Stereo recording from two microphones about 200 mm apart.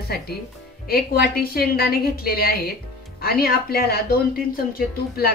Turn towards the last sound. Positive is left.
turn(degrees=50)  # may be behind; listen again after turning